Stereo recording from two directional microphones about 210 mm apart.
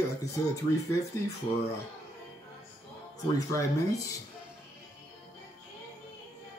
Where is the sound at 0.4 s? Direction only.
15° left (ahead or behind).